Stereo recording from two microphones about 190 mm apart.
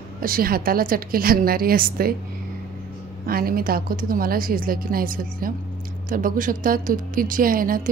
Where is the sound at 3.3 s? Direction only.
50° right (ahead or behind).